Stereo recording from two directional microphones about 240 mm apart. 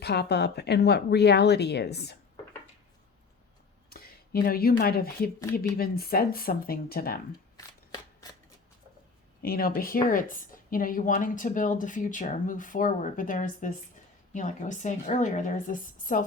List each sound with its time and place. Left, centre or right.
0.0 s speech: left
3.8 s a woman's voice: left
7.5 s scissors: centre
9.4 s a woman's voice: left